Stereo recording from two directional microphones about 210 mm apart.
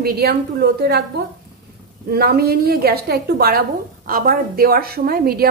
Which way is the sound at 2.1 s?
45° right (ahead or behind).